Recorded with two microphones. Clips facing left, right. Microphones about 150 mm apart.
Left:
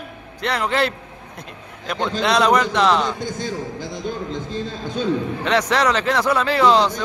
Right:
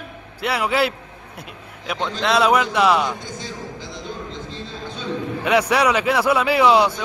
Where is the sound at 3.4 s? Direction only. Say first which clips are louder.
Left 5 dB; 50° left (ahead or behind).